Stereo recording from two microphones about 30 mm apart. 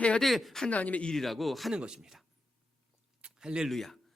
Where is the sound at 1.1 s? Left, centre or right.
Centre.